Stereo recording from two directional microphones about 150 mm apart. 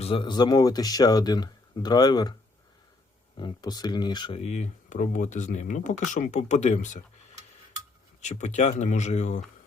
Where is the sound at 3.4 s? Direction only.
25° left (ahead or behind); by 7.0 s 55° left (ahead or behind).